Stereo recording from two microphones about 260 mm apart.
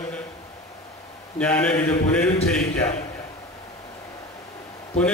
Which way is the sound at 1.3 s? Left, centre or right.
Centre.